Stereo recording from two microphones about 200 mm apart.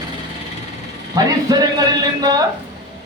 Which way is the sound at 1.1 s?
20° right (ahead or behind).